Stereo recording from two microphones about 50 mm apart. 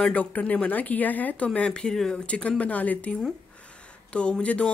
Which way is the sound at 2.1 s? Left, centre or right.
Left.